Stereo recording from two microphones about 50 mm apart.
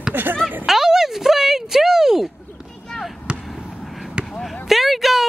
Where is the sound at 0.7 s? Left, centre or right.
Centre.